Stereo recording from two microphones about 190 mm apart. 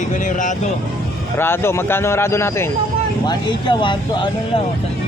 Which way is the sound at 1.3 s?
10° left (ahead or behind).